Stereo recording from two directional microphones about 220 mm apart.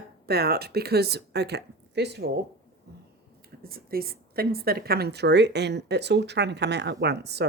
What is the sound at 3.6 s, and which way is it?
Speech, 45° right (ahead or behind).